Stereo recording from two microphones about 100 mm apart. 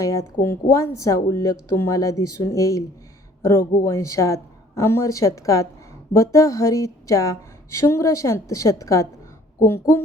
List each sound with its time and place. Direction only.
0.0 s a woman's voice: 30° left (ahead or behind)